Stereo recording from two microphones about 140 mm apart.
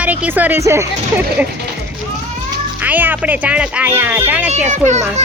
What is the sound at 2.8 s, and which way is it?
Speech, 10° right (ahead or behind).